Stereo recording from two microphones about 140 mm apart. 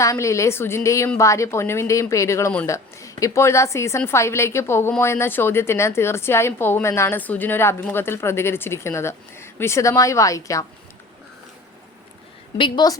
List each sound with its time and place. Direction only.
0.0 s a woman's voice: 20° left (ahead or behind)
12.5 s a woman's voice: 35° left (ahead or behind)